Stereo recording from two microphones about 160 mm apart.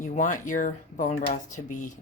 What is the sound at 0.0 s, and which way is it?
Speech, 50° left (ahead or behind).